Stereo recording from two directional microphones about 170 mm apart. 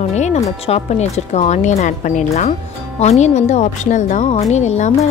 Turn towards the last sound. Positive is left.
turn(degrees=45)  # may be behind; listen again after turning